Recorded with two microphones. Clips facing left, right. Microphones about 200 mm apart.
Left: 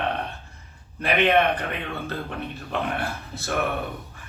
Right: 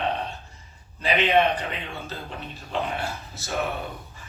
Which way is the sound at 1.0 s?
60° left (ahead or behind).